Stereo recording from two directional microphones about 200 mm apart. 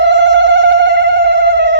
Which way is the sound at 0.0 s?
65° right (ahead or behind).